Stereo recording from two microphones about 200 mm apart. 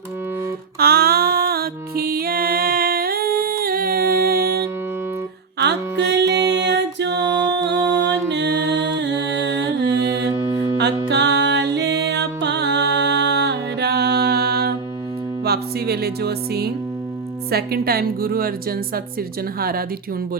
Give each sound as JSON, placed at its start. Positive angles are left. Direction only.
{"t": 0.8, "sound": "music", "side_deg": -50}
{"t": 10.2, "sound": "music", "side_deg": -20}
{"t": 11.1, "sound": "music", "side_deg": -55}
{"t": 17.5, "sound": "a woman's voice", "side_deg": -50}
{"t": 19.5, "sound": "a woman's voice", "side_deg": -50}